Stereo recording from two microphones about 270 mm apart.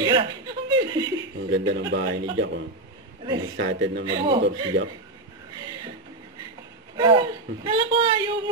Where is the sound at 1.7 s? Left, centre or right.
Right.